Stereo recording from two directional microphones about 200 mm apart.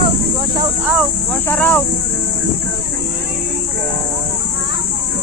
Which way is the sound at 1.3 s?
10° left (ahead or behind).